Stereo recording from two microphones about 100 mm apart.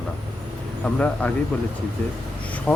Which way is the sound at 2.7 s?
20° left (ahead or behind).